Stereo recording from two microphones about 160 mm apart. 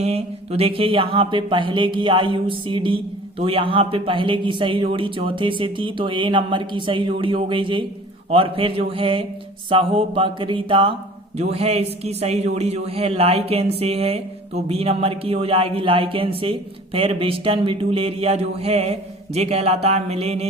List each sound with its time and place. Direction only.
0.0 s a man's voice: 40° right (ahead or behind)